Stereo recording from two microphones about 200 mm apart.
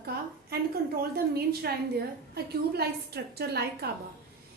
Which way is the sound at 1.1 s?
55° right (ahead or behind).